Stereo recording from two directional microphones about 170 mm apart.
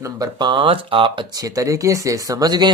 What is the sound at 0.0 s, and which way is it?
Speech, 25° right (ahead or behind).